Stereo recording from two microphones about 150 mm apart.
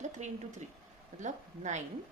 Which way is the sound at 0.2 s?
50° right (ahead or behind).